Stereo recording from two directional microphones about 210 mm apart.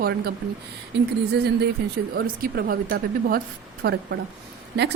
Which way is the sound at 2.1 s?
45° right (ahead or behind).